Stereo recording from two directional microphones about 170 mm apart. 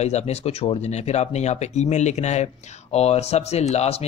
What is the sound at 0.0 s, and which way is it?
Speech, 40° left (ahead or behind).